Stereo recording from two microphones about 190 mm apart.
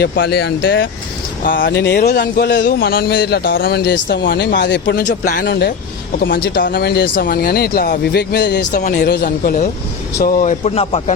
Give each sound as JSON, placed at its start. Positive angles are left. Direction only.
{"t": 0.0, "sound": "speech", "side_deg": 60}
{"t": 1.5, "sound": "a man's voice", "side_deg": 65}
{"t": 5.0, "sound": "a man's voice", "side_deg": 50}
{"t": 6.3, "sound": "speech", "side_deg": 50}
{"t": 8.7, "sound": "speech", "side_deg": 45}
{"t": 9.0, "sound": "a man's voice", "side_deg": 60}
{"t": 9.2, "sound": "speech", "side_deg": 40}